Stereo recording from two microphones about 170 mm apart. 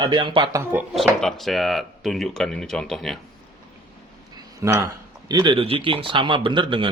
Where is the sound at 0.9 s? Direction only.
Centre (ahead or behind).